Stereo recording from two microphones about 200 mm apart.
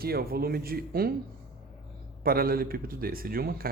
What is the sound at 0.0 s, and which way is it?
A man's voice, 50° right (ahead or behind).